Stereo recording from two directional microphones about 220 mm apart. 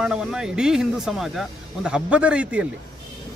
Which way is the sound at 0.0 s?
5° right (ahead or behind).